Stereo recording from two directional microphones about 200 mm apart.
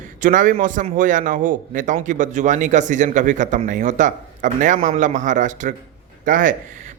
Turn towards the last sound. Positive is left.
turn(degrees=-40)  # may be behind; listen again after turning